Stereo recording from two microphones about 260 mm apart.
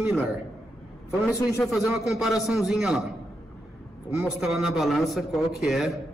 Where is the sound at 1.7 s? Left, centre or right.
Centre.